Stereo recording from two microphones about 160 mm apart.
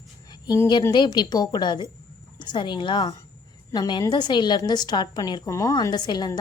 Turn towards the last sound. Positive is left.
turn(degrees=25)  # may be behind; listen again after turning